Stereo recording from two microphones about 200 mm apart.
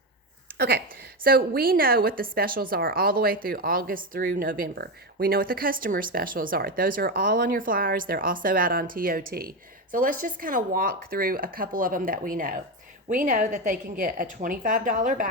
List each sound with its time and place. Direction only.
1.2 s a woman's voice: 50° right (ahead or behind)